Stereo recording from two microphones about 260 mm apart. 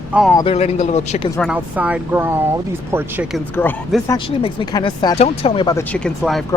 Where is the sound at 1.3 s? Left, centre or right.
Centre.